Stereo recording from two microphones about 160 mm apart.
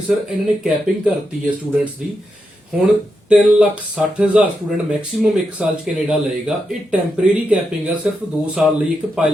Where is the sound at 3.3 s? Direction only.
5° right (ahead or behind).